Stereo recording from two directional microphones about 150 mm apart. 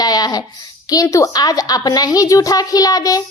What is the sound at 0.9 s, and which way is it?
A woman's voice, 20° left (ahead or behind).